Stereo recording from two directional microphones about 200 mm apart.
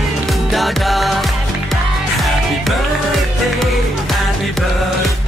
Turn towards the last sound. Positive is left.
turn(degrees=0)  # may be behind; listen again after turning